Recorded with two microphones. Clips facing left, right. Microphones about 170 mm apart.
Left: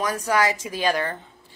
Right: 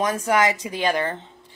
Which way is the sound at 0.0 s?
20° right (ahead or behind).